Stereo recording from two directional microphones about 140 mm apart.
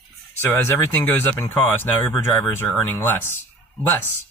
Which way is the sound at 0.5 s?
15° left (ahead or behind).